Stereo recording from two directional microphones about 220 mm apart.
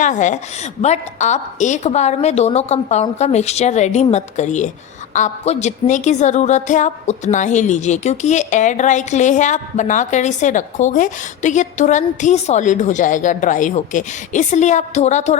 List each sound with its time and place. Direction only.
0.0 s a woman's voice: 35° left (ahead or behind)